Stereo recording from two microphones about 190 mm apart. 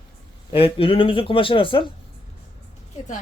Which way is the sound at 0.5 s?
30° left (ahead or behind).